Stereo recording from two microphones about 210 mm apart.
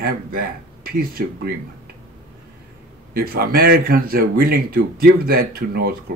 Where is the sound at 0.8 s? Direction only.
45° right (ahead or behind).